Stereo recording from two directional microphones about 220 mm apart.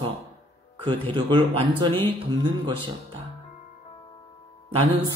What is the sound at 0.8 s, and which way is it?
Speech, 25° right (ahead or behind).